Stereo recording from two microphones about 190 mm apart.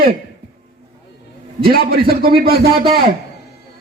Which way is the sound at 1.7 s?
50° right (ahead or behind).